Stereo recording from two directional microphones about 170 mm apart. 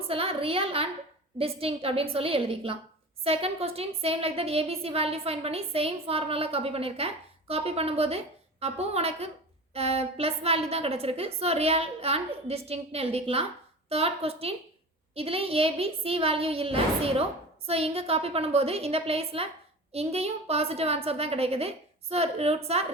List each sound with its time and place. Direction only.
0.1 s a woman's voice: 35° right (ahead or behind)